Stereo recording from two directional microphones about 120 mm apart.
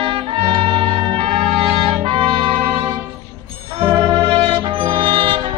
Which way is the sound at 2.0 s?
45° right (ahead or behind).